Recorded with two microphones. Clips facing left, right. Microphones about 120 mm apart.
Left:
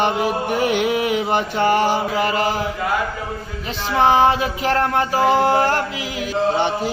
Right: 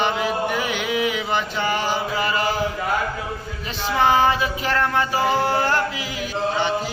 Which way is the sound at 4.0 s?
30° left (ahead or behind).